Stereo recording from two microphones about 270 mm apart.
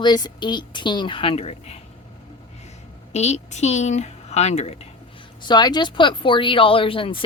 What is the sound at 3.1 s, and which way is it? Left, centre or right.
Speech, left.